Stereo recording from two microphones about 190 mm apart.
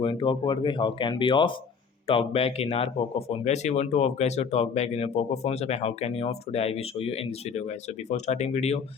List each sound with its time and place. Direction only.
0.0 s speech: 25° left (ahead or behind)